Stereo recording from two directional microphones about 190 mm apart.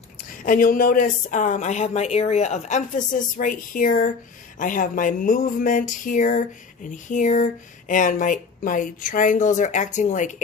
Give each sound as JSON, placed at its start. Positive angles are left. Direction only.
{"t": 0.4, "sound": "speech", "side_deg": 45}